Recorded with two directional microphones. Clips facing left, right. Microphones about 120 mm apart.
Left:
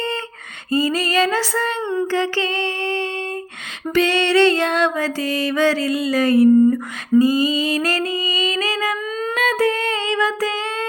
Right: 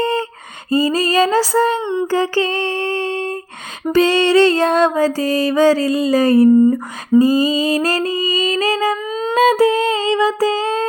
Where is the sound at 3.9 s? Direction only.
35° right (ahead or behind).